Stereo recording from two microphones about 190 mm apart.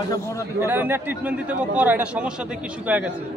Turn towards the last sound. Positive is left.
turn(degrees=-10)  # may be behind; listen again after turning